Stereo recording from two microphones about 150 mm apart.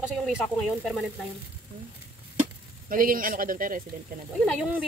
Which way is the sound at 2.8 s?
65° right (ahead or behind).